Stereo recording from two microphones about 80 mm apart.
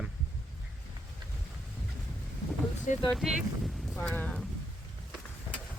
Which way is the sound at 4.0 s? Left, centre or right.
Centre.